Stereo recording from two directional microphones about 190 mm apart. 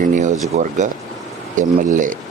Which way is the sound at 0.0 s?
40° right (ahead or behind).